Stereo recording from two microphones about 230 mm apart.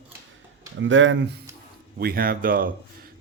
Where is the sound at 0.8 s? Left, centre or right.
Right.